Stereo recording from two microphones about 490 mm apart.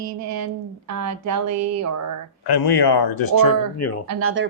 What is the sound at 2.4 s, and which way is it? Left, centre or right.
Speech, left.